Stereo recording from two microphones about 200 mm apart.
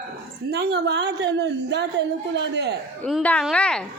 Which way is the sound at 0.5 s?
55° right (ahead or behind).